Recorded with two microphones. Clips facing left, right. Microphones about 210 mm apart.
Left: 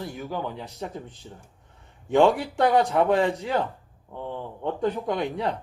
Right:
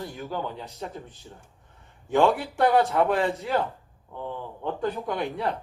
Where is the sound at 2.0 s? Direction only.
15° left (ahead or behind).